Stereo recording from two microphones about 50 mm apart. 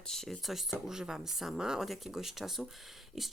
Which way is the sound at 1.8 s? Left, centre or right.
Centre.